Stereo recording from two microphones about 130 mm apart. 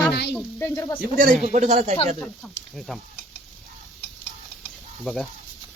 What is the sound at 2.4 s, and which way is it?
Speech, centre (ahead or behind).